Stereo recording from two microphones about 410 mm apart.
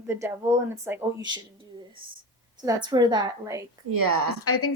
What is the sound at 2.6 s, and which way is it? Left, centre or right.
A woman's voice, centre.